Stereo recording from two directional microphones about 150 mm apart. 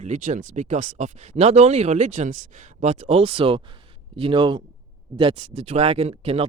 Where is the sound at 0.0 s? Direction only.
55° right (ahead or behind).